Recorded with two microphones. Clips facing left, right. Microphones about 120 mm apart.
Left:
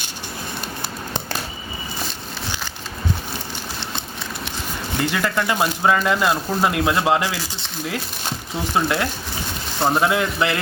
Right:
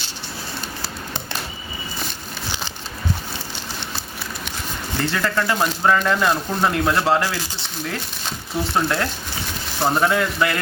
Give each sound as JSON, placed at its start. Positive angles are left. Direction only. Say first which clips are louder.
{"t": 5.0, "sound": "speech", "louder": "even", "side_deg": 15}
{"t": 8.7, "sound": "speech", "louder": "left 2 dB", "side_deg": 10}